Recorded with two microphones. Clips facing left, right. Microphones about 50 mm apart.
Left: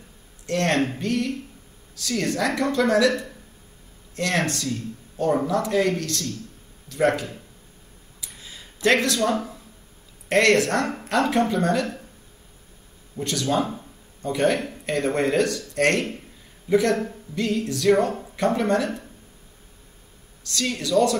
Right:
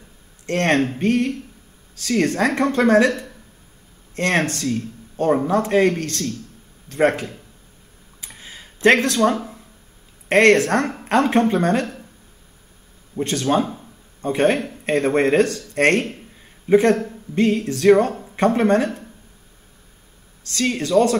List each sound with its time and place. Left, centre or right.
0.5 s speech: right
8.2 s a sound: right
10.2 s speech: right
13.1 s speech: right
20.4 s speech: right